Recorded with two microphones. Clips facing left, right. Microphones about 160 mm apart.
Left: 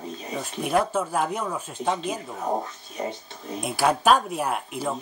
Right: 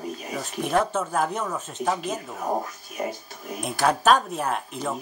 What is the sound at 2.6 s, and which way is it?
Speech, 25° left (ahead or behind).